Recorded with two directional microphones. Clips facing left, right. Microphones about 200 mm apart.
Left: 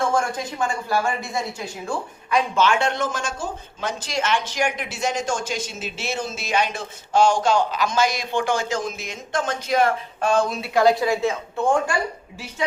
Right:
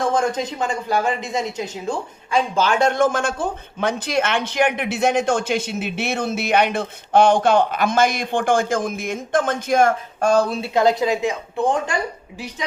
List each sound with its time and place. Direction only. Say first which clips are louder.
0.0 s a woman's voice: right 3 dB; 20° right (ahead or behind)
2.6 s speech: right 6 dB; 40° right (ahead or behind); by 11.9 s 20° right (ahead or behind)